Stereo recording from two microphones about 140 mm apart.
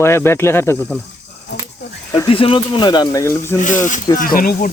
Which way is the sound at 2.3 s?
40° left (ahead or behind).